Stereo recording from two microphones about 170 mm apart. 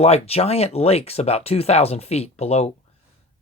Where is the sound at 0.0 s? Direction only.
35° left (ahead or behind).